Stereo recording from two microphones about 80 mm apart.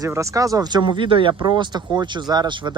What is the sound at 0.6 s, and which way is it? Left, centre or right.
Speech, right.